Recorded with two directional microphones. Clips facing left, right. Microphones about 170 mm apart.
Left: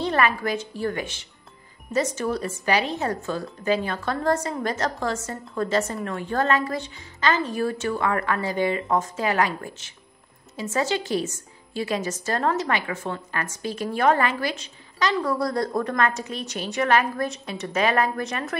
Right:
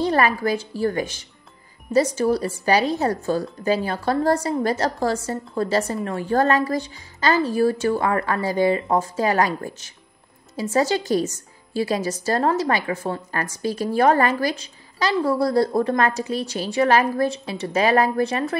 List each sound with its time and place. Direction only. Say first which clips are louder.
0.0 s a woman's voice: right 3 dB; 35° right (ahead or behind)